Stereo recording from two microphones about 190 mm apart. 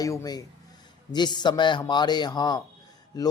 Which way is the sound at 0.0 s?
15° left (ahead or behind).